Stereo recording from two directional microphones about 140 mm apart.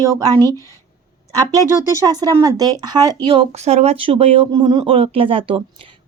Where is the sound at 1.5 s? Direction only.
25° right (ahead or behind).